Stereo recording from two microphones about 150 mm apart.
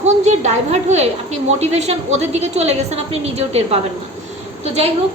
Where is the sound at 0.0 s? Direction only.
50° right (ahead or behind).